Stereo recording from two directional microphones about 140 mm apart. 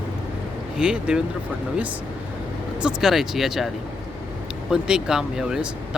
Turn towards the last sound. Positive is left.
turn(degrees=-5)  # may be behind; listen again after turning